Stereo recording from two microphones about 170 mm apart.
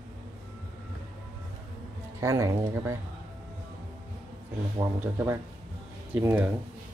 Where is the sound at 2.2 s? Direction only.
15° right (ahead or behind).